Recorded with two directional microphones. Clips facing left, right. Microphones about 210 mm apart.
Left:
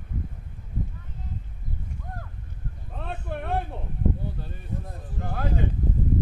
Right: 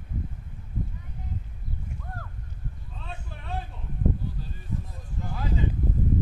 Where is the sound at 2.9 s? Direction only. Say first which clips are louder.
Left 12 dB; 60° left (ahead or behind).